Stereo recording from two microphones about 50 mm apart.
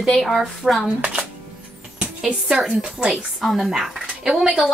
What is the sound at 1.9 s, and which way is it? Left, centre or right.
Speech, right.